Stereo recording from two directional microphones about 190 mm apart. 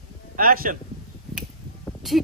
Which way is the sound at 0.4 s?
50° right (ahead or behind).